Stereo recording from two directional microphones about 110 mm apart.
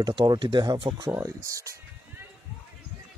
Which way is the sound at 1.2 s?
30° right (ahead or behind).